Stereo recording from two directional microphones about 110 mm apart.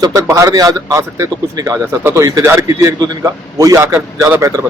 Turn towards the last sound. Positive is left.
turn(degrees=-30)  # may be behind; listen again after turning